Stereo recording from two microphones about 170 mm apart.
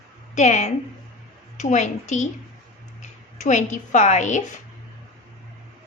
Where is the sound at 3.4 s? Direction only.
45° left (ahead or behind).